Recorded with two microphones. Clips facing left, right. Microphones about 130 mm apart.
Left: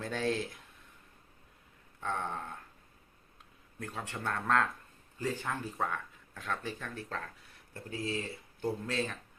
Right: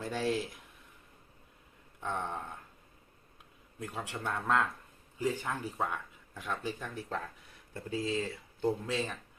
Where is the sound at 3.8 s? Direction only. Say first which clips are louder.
Right 1 dB; 15° right (ahead or behind).